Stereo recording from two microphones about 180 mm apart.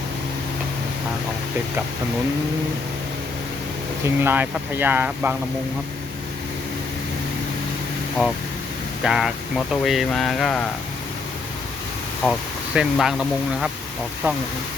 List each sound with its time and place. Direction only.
4.0 s speech: 10° right (ahead or behind)
8.2 s speech: 5° right (ahead or behind)
12.2 s speech: centre (ahead or behind)